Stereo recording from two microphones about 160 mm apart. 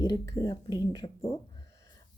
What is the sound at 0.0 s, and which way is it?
Speech, 20° left (ahead or behind).